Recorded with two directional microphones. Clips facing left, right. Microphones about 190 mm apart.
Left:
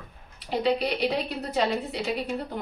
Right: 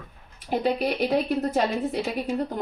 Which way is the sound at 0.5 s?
50° right (ahead or behind).